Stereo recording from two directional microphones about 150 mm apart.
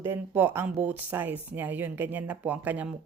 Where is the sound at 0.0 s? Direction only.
15° right (ahead or behind).